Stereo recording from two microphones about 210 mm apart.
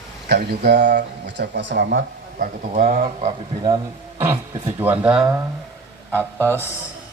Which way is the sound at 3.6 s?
15° right (ahead or behind).